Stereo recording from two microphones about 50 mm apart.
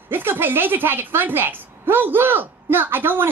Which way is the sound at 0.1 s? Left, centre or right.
Right.